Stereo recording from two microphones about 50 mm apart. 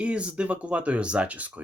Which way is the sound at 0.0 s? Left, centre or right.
Right.